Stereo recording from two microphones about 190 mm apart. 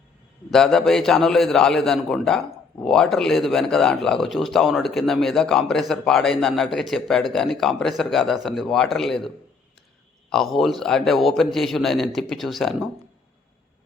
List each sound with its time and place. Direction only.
0.5 s a man's voice: centre (ahead or behind)